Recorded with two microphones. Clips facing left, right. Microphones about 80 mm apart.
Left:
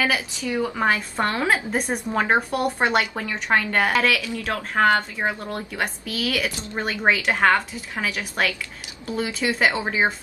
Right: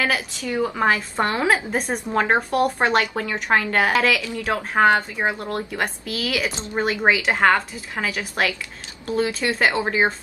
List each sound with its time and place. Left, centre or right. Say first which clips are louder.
0.0 s speech: even; centre
4.2 s speech: right 3 dB; centre
5.3 s speech: right 3 dB; centre
6.4 s speech: right 2 dB; right
6.8 s speech: right 2 dB; centre